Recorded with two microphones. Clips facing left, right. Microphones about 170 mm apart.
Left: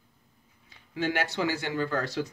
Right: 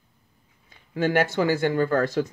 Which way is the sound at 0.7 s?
50° right (ahead or behind).